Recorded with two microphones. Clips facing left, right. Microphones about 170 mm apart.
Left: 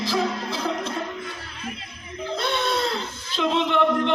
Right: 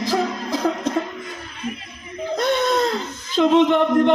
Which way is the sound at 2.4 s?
45° right (ahead or behind).